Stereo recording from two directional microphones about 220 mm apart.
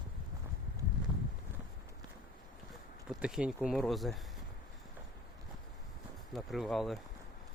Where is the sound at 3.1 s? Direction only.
5° right (ahead or behind).